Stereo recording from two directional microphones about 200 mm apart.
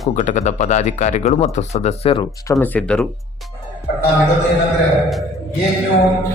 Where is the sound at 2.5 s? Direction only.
10° left (ahead or behind).